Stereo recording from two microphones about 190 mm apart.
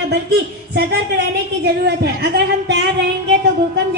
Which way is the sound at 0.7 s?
55° right (ahead or behind).